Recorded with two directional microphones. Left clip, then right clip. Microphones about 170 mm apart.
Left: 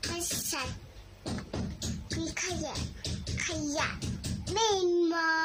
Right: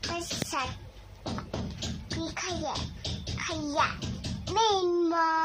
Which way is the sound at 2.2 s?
15° left (ahead or behind).